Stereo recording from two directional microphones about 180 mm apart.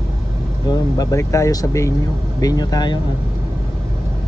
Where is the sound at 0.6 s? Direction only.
20° left (ahead or behind).